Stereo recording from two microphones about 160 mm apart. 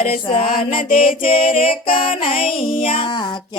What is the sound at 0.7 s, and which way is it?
Female singing, 35° left (ahead or behind).